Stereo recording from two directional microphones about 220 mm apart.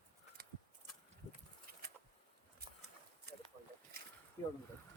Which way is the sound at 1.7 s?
45° right (ahead or behind).